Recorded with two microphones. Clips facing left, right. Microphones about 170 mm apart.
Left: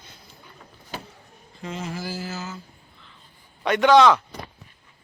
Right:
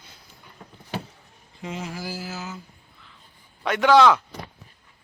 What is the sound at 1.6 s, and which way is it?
Speech, 10° right (ahead or behind).